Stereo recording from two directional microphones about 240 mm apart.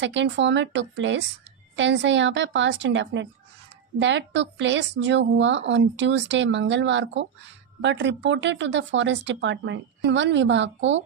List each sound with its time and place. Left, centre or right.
0.0 s a woman's voice: right